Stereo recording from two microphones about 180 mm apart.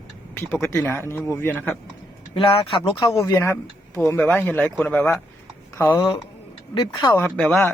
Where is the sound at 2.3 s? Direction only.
30° left (ahead or behind).